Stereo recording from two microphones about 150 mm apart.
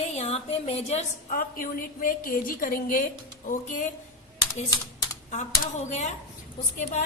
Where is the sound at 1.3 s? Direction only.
70° left (ahead or behind).